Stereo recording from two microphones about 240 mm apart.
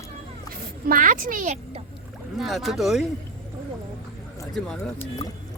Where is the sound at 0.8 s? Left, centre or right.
Right.